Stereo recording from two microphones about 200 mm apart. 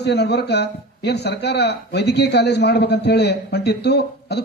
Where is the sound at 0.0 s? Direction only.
55° left (ahead or behind).